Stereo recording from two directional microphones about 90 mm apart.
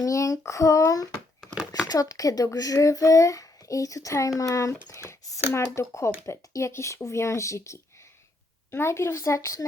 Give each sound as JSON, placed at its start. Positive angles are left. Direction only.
{"t": 0.0, "sound": "speech", "side_deg": 40}